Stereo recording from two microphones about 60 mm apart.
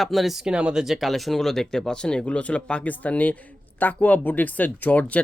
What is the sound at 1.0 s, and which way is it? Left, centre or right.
Speech, centre.